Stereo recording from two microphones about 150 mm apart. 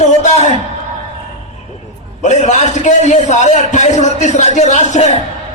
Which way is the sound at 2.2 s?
50° left (ahead or behind).